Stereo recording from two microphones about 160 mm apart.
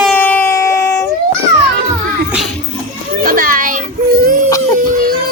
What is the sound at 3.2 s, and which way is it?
Children playing, 60° right (ahead or behind).